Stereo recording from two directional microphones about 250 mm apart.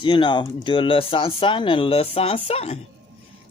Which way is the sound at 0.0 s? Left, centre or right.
Centre.